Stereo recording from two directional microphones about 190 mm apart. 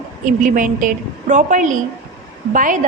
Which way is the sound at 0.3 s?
45° right (ahead or behind).